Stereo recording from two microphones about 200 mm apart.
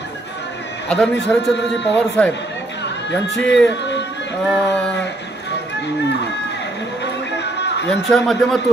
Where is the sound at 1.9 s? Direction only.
5° left (ahead or behind).